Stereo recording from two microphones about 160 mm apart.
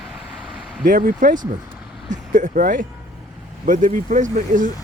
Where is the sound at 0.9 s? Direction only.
60° right (ahead or behind).